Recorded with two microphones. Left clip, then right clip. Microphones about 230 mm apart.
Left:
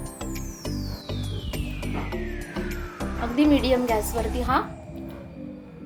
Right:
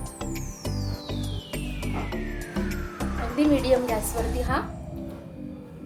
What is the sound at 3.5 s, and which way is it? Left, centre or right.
Speech, centre.